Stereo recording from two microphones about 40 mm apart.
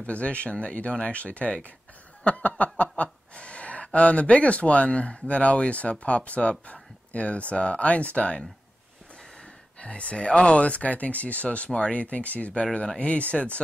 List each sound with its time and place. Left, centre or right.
0.0 s speech: left
2.2 s snicker: left
2.6 s speech: left
6.7 s a sound: left
7.5 s speech: left
9.8 s speech: left